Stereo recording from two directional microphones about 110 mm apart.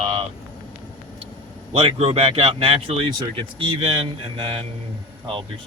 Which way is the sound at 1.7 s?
60° right (ahead or behind).